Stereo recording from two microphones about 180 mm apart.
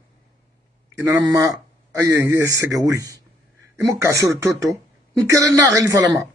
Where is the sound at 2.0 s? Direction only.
15° right (ahead or behind).